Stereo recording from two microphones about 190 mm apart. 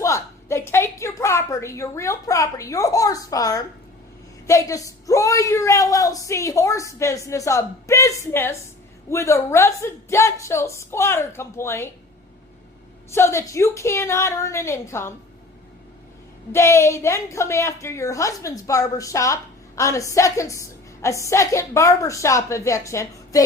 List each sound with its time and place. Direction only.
0.0 s a sound: 15° left (ahead or behind)
4.4 s a woman's voice: 15° left (ahead or behind)
13.1 s a woman's voice: 15° left (ahead or behind)
16.5 s a woman's voice: 15° left (ahead or behind)